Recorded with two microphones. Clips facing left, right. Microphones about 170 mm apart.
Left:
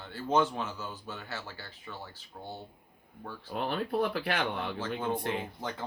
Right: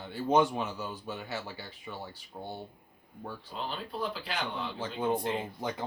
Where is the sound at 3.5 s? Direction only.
60° left (ahead or behind).